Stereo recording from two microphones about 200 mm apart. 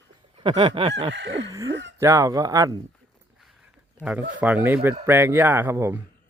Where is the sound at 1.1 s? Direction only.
70° right (ahead or behind).